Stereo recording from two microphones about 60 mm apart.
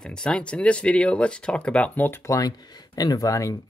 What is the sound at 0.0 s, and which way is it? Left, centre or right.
Speech, centre.